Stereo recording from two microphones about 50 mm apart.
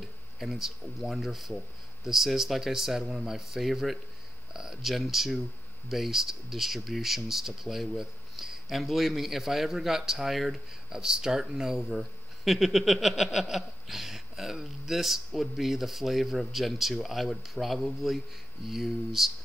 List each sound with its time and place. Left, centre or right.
0.4 s speech: centre
10.9 s speech: centre